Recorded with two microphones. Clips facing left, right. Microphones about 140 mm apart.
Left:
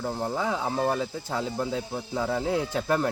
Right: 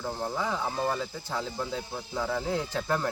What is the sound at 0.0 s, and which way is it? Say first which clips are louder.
Speech: left 3 dB; 15° left (ahead or behind).